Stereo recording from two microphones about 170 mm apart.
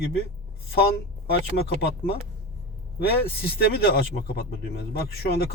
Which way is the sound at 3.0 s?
65° left (ahead or behind).